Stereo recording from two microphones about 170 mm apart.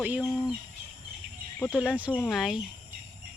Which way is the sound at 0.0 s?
5° right (ahead or behind).